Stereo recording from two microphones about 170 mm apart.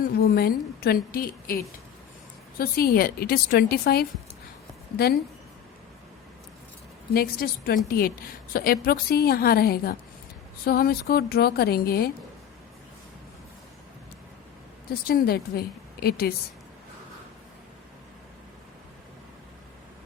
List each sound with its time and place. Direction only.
0.2 s a woman's voice: 65° left (ahead or behind)
7.1 s a woman's voice: 65° left (ahead or behind)
14.8 s a woman's voice: 65° left (ahead or behind)